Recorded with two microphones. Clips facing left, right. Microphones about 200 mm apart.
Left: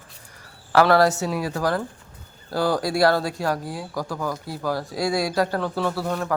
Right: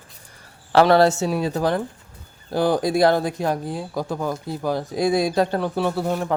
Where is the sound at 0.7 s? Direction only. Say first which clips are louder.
Right 2 dB; 25° right (ahead or behind).